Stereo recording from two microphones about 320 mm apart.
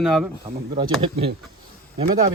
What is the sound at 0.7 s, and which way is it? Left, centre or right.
Speech, centre.